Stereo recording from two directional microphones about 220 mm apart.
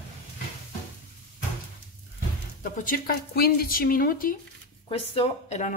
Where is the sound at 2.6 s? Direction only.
40° left (ahead or behind).